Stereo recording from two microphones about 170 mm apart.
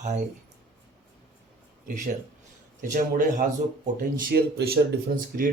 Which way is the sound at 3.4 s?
50° right (ahead or behind).